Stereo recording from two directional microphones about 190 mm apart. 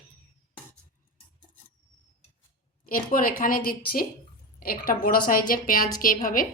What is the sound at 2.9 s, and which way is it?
A woman's voice, 50° left (ahead or behind).